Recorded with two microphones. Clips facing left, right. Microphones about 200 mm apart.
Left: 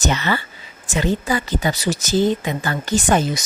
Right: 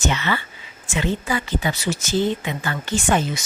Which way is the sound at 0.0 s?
40° left (ahead or behind).